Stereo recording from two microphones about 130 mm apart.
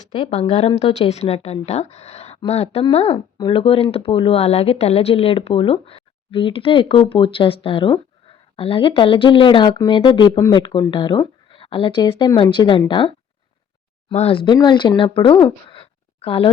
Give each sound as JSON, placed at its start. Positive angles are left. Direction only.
{"t": 0.1, "sound": "speech", "side_deg": 45}
{"t": 3.3, "sound": "speech", "side_deg": 40}
{"t": 15.7, "sound": "a sound", "side_deg": 45}